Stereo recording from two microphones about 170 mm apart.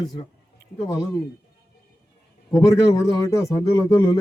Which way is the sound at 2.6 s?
20° left (ahead or behind).